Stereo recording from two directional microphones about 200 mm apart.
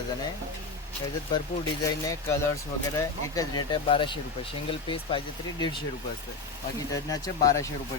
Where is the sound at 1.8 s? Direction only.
15° left (ahead or behind).